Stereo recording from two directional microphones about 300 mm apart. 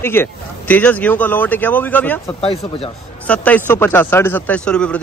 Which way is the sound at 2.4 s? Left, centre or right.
Centre.